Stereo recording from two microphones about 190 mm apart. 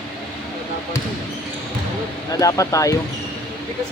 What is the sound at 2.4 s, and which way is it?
Speech, 15° left (ahead or behind).